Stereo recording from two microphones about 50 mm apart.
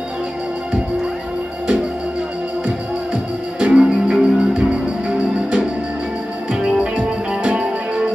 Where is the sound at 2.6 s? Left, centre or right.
Centre.